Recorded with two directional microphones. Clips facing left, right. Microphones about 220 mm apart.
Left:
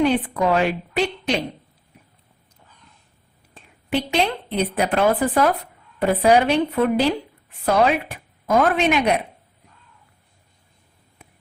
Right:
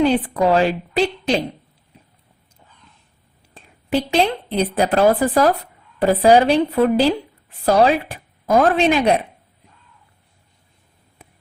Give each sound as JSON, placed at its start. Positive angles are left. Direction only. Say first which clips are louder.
{"t": 0.0, "sound": "a woman's voice", "louder": "right 3 dB", "side_deg": -35}
{"t": 3.5, "sound": "a sound", "louder": "right 3 dB", "side_deg": -35}
{"t": 4.4, "sound": "speech", "louder": "right 3 dB", "side_deg": -30}